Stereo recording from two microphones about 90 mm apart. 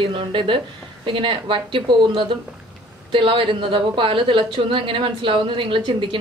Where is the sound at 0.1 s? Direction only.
70° right (ahead or behind).